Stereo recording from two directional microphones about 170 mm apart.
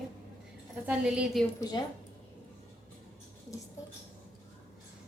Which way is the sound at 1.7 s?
25° left (ahead or behind).